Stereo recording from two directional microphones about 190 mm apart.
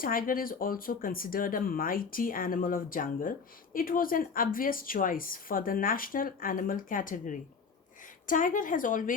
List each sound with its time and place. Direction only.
0.0 s speech: 50° left (ahead or behind)